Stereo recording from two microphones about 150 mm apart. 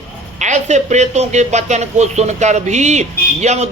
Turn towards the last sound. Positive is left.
turn(degrees=-50)  # may be behind; listen again after turning